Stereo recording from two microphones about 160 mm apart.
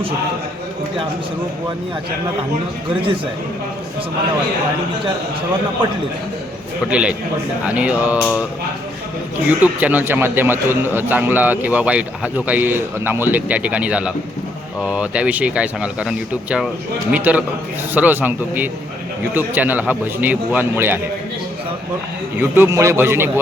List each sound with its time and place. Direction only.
6.9 s a man's voice: 5° right (ahead or behind)
9.6 s a man's voice: 10° right (ahead or behind)
22.4 s a man's voice: 15° right (ahead or behind)